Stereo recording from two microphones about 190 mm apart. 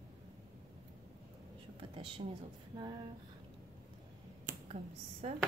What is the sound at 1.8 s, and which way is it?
Speech, 25° right (ahead or behind).